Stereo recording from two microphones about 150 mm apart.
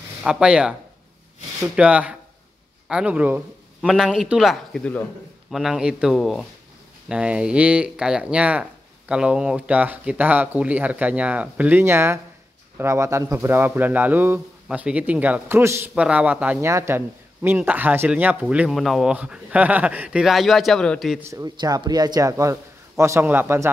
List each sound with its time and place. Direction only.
0.2 s speech: 5° right (ahead or behind)
1.8 s a man's voice: 10° right (ahead or behind)
21.2 s a man's voice: 20° right (ahead or behind)